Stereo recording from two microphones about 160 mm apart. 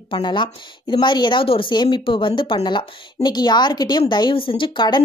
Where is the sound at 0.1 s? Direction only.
30° left (ahead or behind).